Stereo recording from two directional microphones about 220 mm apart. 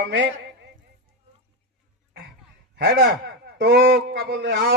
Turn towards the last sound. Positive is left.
turn(degrees=-50)  # may be behind; listen again after turning